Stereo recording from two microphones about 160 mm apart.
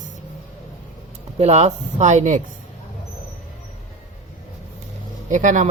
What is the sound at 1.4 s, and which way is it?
Speech, 45° right (ahead or behind).